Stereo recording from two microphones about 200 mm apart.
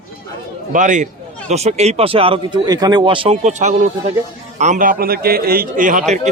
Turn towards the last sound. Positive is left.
turn(degrees=-40)  # may be behind; listen again after turning